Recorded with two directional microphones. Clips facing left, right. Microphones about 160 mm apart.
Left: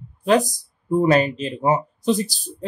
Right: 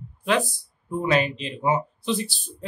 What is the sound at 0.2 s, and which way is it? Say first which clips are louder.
Speech: left 6 dB; 40° left (ahead or behind).